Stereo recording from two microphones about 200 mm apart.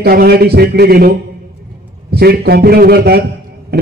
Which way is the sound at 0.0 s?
50° right (ahead or behind).